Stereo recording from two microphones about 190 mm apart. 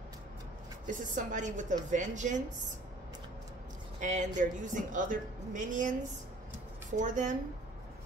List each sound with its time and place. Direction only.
0.8 s a woman's voice: 40° right (ahead or behind)
4.0 s a woman's voice: 40° right (ahead or behind)